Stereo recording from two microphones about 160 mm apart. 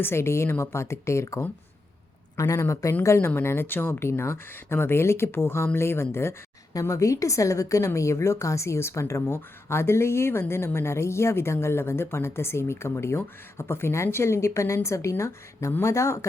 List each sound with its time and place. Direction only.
0.0 s a woman's voice: 15° left (ahead or behind)